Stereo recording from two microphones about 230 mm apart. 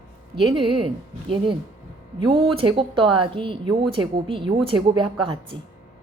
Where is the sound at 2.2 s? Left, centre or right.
Right.